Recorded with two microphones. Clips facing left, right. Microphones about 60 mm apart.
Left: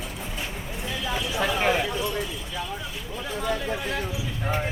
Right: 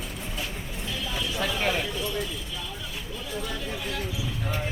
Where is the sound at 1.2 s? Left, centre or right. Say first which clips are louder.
Left 3 dB; centre.